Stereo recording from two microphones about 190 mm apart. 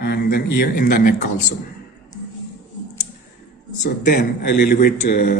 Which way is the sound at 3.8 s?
50° left (ahead or behind).